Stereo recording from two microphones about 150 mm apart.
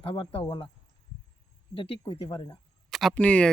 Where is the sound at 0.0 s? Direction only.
40° left (ahead or behind).